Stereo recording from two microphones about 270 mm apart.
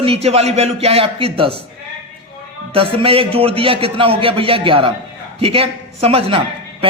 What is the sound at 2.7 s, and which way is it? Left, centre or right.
A man's voice, centre.